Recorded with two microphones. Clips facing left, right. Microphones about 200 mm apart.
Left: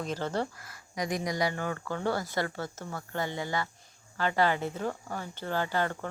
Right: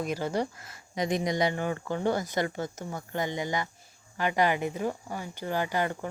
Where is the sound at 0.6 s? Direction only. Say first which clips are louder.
Right 3 dB; 25° right (ahead or behind).